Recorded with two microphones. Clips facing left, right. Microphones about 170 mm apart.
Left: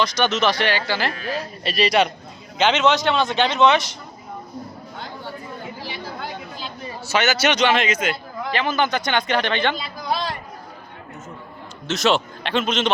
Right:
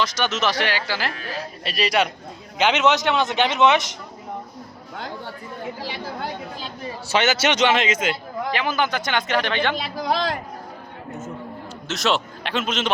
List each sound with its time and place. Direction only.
0.0 s a man's voice: 5° right (ahead or behind)
7.1 s a man's voice: 25° right (ahead or behind)
8.5 s a man's voice: 10° right (ahead or behind)
9.7 s a man's voice: 90° right
11.9 s speech: centre (ahead or behind)